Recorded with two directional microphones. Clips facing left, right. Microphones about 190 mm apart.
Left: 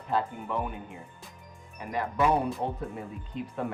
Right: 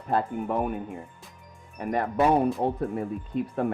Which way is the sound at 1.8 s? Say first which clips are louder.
Right 4 dB; 55° right (ahead or behind).